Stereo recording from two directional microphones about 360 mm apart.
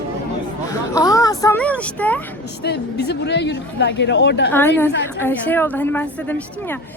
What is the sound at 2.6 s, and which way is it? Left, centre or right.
A woman's voice, left.